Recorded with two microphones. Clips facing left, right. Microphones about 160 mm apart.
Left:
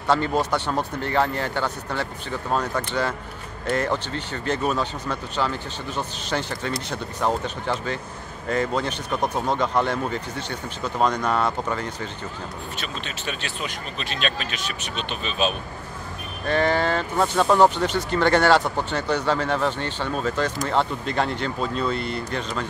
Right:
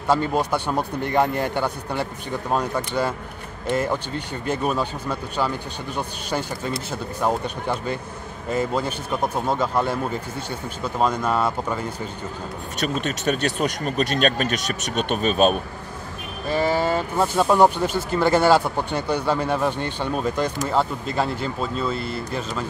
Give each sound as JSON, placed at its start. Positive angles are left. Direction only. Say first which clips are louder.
{"t": 0.1, "sound": "speech", "louder": "right 1 dB", "side_deg": -10}
{"t": 12.8, "sound": "speech", "louder": "right 12 dB", "side_deg": -45}
{"t": 16.4, "sound": "speech", "louder": "even", "side_deg": -5}